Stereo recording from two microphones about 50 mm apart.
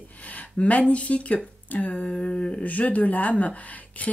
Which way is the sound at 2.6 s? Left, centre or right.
Left.